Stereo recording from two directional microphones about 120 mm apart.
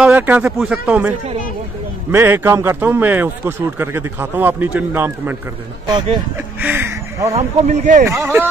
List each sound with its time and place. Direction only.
0.0 s a man's voice: 15° right (ahead or behind)
7.3 s a man's voice: 75° right (ahead or behind)
8.0 s speech: 25° right (ahead or behind)